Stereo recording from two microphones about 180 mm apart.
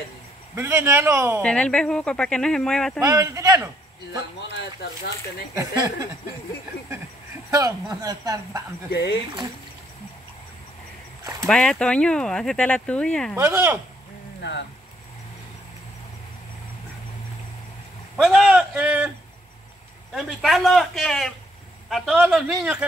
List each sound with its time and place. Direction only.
0.6 s a man's voice: 15° right (ahead or behind)
1.4 s speech: 5° left (ahead or behind)
3.0 s speech: 15° right (ahead or behind)
5.5 s speech: 20° right (ahead or behind)
7.5 s speech: 20° right (ahead or behind)
8.9 s speech: 65° left (ahead or behind)
11.4 s speech: 5° left (ahead or behind)
13.4 s a man's voice: 10° right (ahead or behind)
18.2 s speech: centre (ahead or behind)
20.2 s speech: centre (ahead or behind)